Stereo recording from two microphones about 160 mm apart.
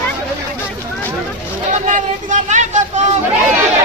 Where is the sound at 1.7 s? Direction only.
50° right (ahead or behind).